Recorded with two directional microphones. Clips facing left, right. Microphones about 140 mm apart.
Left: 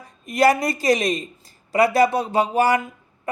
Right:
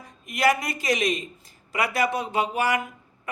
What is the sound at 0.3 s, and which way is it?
Speech, 35° left (ahead or behind).